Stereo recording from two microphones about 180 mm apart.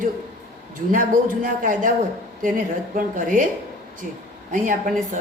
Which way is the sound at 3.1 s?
45° right (ahead or behind).